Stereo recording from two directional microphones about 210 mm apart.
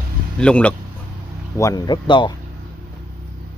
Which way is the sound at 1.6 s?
15° left (ahead or behind).